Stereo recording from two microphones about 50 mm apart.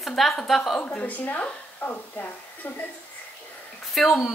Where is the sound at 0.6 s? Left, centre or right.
Centre.